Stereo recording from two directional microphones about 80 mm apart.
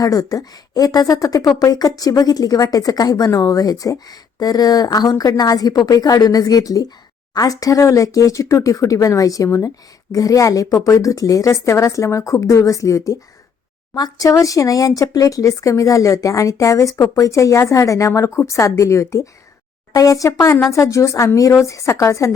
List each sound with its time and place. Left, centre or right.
0.0 s speech: left